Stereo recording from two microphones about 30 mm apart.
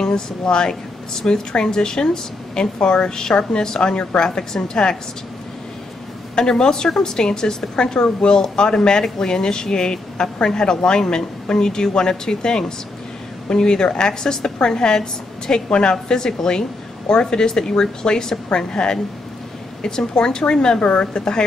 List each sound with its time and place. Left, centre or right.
0.0 s a woman's voice: left
3.8 s a woman's voice: left
6.3 s a woman's voice: left